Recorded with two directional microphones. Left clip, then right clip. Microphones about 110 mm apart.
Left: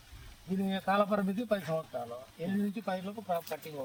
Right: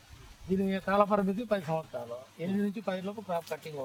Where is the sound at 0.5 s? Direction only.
25° right (ahead or behind).